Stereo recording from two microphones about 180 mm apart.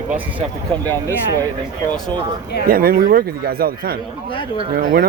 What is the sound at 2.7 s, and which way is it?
A man's voice, 55° right (ahead or behind).